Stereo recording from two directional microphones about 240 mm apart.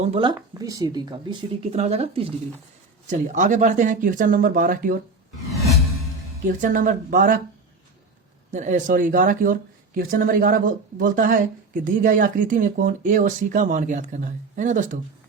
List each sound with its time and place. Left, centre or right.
0.0 s speech: right
6.6 s speech: right
8.5 s speech: right